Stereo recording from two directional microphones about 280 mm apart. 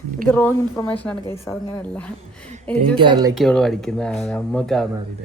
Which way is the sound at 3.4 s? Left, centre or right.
Centre.